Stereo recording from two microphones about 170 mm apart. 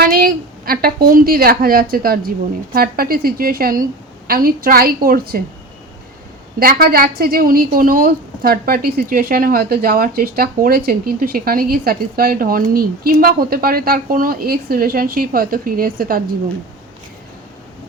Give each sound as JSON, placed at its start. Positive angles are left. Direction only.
{"t": 0.0, "sound": "a woman's voice", "side_deg": -60}
{"t": 6.6, "sound": "a woman's voice", "side_deg": -60}